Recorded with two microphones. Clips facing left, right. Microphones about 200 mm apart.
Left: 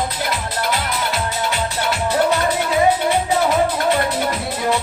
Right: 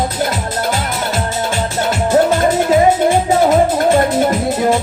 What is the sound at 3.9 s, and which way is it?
Music, 45° right (ahead or behind).